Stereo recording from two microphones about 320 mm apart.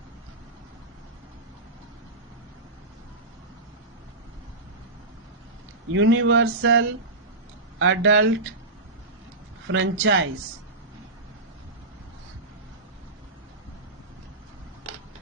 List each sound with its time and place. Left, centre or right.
5.9 s speech: right
9.6 s speech: right